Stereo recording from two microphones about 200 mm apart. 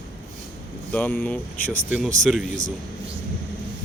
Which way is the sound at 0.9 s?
10° left (ahead or behind).